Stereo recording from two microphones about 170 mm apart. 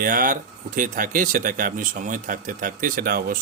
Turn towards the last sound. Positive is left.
turn(degrees=-55)  # may be behind; listen again after turning